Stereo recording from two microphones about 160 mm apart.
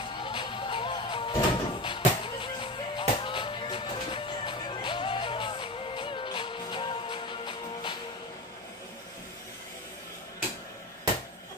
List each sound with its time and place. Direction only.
0.0 s music: 30° left (ahead or behind)